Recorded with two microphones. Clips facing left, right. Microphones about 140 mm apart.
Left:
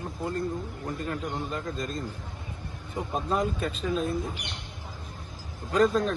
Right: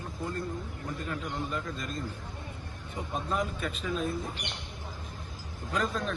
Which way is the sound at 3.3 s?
35° left (ahead or behind).